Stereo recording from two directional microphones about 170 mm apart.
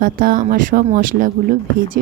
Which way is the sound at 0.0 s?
55° right (ahead or behind).